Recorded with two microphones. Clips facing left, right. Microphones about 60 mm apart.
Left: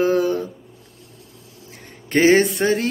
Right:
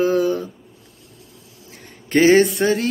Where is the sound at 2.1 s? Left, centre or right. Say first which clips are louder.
Right 1 dB; left.